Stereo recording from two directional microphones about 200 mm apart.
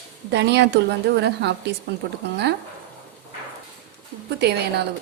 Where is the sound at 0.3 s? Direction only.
60° right (ahead or behind).